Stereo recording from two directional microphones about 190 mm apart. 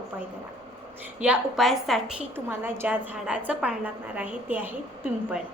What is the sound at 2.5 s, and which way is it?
Speech, 10° right (ahead or behind).